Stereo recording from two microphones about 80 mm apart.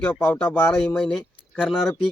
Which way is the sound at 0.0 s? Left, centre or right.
Centre.